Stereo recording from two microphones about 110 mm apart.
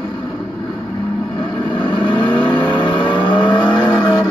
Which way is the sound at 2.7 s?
45° left (ahead or behind).